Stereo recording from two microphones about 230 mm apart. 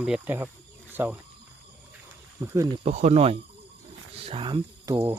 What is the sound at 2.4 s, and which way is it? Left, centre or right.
Speech, centre.